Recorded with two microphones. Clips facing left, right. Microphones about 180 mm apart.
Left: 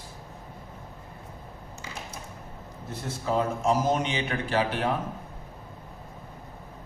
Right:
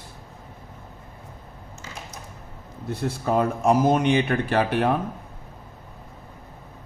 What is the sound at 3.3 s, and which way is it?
Speech, 60° right (ahead or behind).